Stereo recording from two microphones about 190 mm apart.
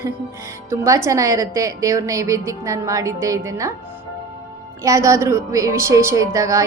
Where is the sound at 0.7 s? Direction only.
15° right (ahead or behind).